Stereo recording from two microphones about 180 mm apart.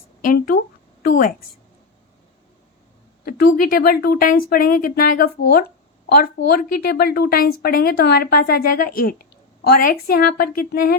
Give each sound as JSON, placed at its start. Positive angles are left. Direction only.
{"t": 0.2, "sound": "a woman's voice", "side_deg": 50}
{"t": 3.2, "sound": "a woman's voice", "side_deg": 55}